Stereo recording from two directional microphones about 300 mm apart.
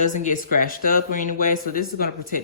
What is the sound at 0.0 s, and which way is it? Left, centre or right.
Speech, left.